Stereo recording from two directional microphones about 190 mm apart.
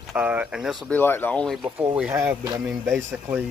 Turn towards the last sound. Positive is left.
turn(degrees=-10)  # may be behind; listen again after turning